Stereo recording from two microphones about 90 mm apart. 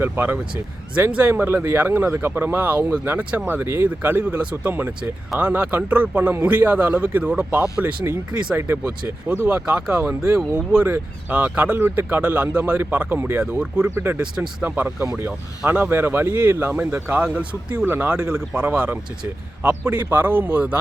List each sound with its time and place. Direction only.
0.0 s speech: 20° right (ahead or behind)
9.6 s speech: 15° right (ahead or behind)
12.7 s speech: 25° right (ahead or behind)
13.6 s speech: 10° right (ahead or behind)
13.9 s speech: 25° right (ahead or behind)
15.0 s speech: 35° right (ahead or behind)
15.3 s speech: 20° right (ahead or behind)